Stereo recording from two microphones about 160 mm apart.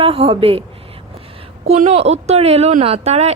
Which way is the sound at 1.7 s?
40° right (ahead or behind).